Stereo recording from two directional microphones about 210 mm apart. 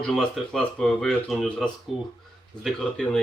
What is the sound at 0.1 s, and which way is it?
Speech, 5° left (ahead or behind).